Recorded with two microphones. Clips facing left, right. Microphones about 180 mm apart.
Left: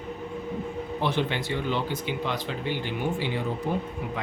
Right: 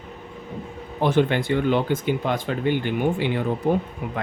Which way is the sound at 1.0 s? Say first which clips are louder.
Right 8 dB; 50° right (ahead or behind).